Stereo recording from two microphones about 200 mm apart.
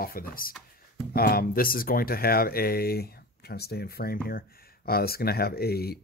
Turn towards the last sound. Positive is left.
turn(degrees=50)  # may be behind; listen again after turning